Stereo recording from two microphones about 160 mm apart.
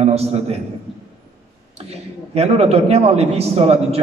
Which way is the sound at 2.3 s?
40° right (ahead or behind).